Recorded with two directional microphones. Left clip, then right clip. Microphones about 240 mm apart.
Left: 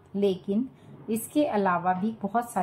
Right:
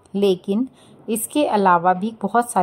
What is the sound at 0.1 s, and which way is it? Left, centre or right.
A woman's voice, right.